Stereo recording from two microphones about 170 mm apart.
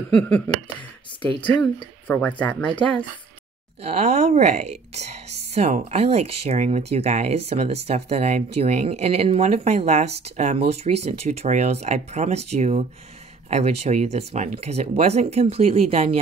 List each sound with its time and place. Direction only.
0.2 s speech: 10° left (ahead or behind)
3.8 s speech: 40° right (ahead or behind)